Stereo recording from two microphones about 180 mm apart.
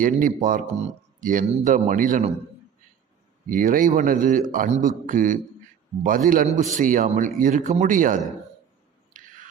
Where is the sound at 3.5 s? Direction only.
50° right (ahead or behind).